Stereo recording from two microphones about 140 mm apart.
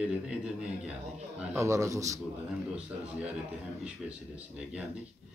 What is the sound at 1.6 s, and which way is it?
Speech, 20° right (ahead or behind).